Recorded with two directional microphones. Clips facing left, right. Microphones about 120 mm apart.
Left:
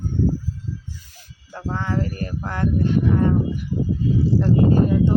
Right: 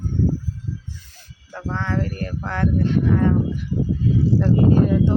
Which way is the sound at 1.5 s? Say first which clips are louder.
Even; 10° left (ahead or behind).